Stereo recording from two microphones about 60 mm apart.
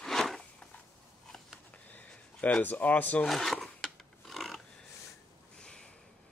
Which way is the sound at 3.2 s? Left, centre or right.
Centre.